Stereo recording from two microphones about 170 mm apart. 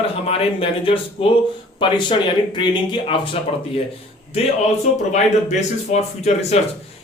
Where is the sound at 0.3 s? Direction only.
35° left (ahead or behind).